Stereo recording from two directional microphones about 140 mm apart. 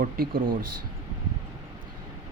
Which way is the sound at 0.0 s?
90° right.